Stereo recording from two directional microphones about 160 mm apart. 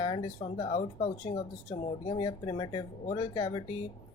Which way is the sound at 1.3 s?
30° left (ahead or behind).